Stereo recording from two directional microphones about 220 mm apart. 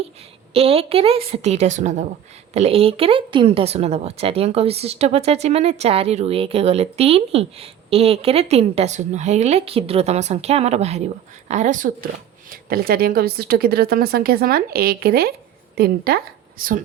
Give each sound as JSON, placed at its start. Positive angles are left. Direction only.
{"t": 0.5, "sound": "a woman's voice", "side_deg": -25}